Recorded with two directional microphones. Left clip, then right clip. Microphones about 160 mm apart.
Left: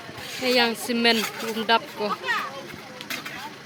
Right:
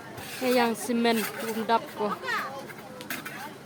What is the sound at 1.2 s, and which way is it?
Speech, 35° left (ahead or behind).